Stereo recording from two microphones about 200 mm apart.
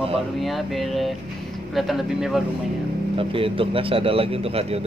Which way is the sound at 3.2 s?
25° right (ahead or behind).